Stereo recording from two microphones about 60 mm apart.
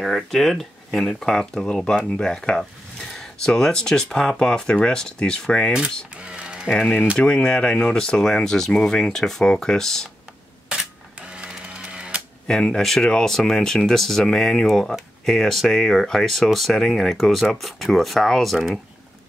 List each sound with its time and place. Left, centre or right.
0.0 s speech: centre
6.2 s music: centre
7.2 s speech: centre
10.7 s a sound: centre
12.4 s speech: centre